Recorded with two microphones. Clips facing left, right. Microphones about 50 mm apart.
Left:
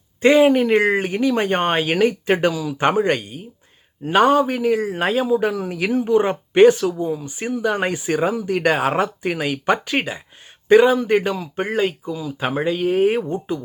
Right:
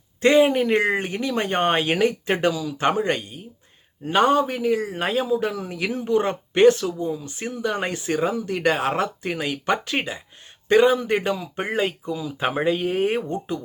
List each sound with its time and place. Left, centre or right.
0.2 s speech: centre
2.6 s speech: left
6.9 s speech: left
10.7 s speech: centre